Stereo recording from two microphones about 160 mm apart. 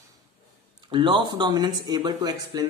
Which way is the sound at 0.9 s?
30° right (ahead or behind).